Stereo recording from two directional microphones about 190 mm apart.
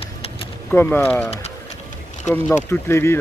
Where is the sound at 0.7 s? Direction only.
10° left (ahead or behind).